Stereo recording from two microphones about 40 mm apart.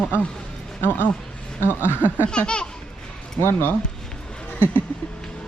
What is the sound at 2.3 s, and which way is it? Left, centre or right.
Laughter, left.